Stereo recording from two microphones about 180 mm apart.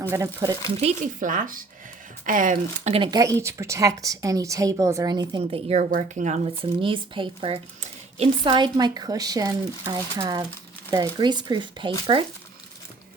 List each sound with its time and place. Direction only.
0.4 s a woman's voice: 20° right (ahead or behind)
0.8 s speech: 40° right (ahead or behind)
2.9 s a woman's voice: 25° right (ahead or behind); by 6.5 s 40° right (ahead or behind)
6.6 s a woman's voice: 30° right (ahead or behind)